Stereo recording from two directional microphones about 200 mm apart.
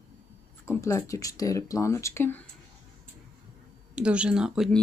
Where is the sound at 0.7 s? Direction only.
15° left (ahead or behind).